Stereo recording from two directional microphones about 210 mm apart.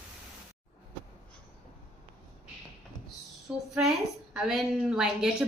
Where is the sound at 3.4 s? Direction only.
Centre (ahead or behind).